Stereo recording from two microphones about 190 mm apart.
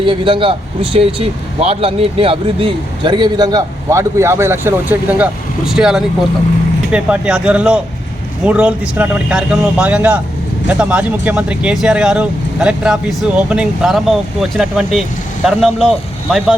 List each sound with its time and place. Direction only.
0.0 s speech: 25° right (ahead or behind); by 15.9 s 5° left (ahead or behind)